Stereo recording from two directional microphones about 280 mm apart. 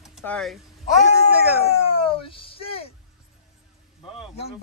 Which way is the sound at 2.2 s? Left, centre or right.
Centre.